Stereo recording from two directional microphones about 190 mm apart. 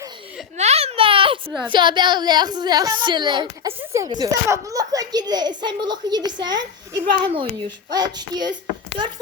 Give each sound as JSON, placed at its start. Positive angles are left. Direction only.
{"t": 0.5, "sound": "a sound", "side_deg": -35}
{"t": 1.5, "sound": "a woman's voice", "side_deg": -10}
{"t": 1.7, "sound": "a child's voice", "side_deg": -25}